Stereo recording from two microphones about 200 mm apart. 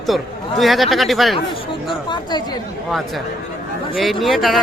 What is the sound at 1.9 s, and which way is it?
Speech, 20° left (ahead or behind).